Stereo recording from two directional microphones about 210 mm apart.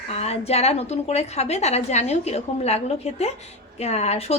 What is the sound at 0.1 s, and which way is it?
A woman's voice, 30° left (ahead or behind).